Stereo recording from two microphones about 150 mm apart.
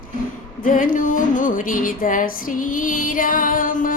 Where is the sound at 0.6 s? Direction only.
65° left (ahead or behind).